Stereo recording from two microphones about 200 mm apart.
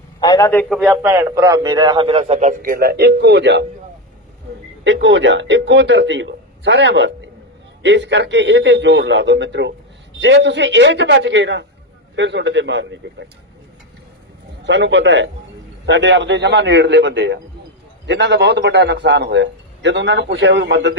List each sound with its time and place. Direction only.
0.2 s a man's voice: 20° left (ahead or behind)
0.6 s a man's voice: centre (ahead or behind)
0.9 s a man's voice: 15° right (ahead or behind); by 3.7 s 60° right (ahead or behind)
4.8 s a man's voice: 65° right (ahead or behind)
14.6 s a man's voice: 60° right (ahead or behind)